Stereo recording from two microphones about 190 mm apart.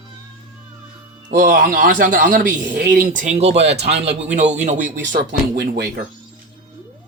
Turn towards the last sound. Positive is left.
turn(degrees=-55)  # may be behind; listen again after turning